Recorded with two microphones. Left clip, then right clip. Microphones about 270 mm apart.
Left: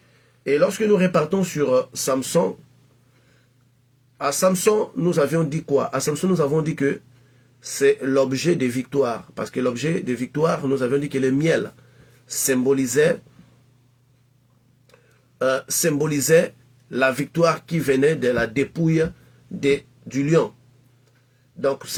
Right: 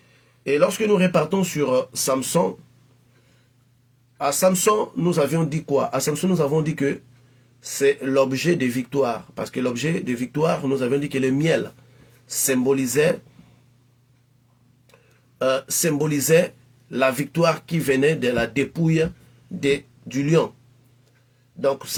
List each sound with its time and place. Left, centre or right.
0.4 s speech: centre
4.2 s speech: centre
12.6 s speech: centre
15.4 s speech: centre
21.6 s speech: centre